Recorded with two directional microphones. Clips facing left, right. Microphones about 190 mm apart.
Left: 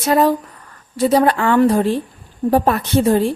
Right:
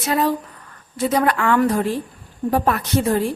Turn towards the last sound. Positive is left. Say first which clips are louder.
# left 4 dB
turn(degrees=30)  # may be behind; listen again after turning